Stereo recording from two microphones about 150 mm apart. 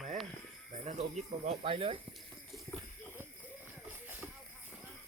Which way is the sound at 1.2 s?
40° right (ahead or behind).